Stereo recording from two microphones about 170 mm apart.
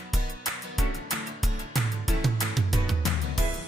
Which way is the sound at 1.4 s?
Centre (ahead or behind).